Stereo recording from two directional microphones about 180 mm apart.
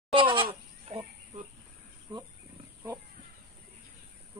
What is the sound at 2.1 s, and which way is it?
Speech, 25° right (ahead or behind).